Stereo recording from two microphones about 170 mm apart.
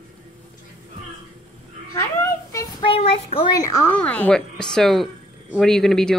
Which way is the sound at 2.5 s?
25° left (ahead or behind).